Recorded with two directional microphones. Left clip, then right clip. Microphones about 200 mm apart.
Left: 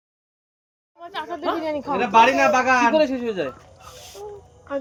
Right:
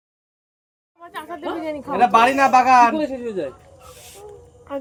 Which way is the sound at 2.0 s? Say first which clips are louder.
Right 1 dB; 40° right (ahead or behind).